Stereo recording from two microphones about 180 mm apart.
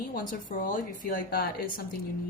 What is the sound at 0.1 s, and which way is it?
A woman's voice, 50° left (ahead or behind).